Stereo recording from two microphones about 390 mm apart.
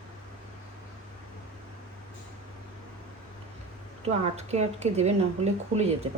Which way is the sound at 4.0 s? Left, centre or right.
Centre.